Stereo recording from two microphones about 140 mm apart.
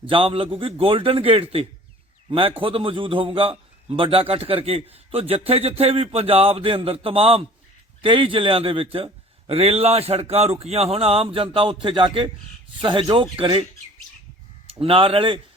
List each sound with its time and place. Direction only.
0.0 s a man's voice: 40° right (ahead or behind)
14.7 s a man's voice: 40° right (ahead or behind)